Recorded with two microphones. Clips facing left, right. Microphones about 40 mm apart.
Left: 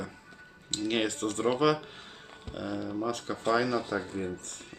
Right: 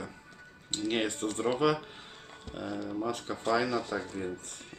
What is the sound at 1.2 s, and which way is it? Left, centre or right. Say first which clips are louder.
Speech: left 1 dB; centre.